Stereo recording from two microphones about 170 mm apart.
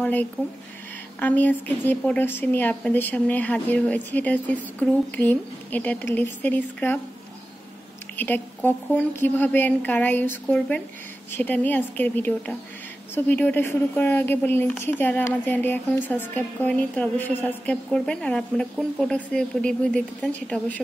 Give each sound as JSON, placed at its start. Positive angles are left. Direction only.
{"t": 0.0, "sound": "a woman's voice", "side_deg": 10}
{"t": 8.2, "sound": "a woman's voice", "side_deg": 10}